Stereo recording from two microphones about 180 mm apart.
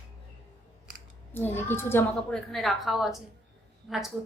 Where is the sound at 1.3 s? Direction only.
10° left (ahead or behind).